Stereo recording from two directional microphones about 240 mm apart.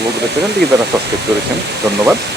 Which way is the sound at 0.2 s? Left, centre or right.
Right.